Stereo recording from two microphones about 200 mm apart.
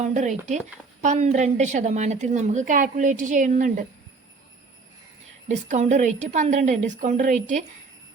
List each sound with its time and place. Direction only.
0.0 s a woman's voice: 35° right (ahead or behind)
5.5 s a woman's voice: 35° right (ahead or behind)